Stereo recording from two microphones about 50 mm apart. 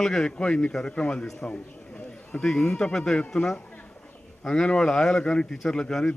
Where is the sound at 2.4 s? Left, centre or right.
Centre.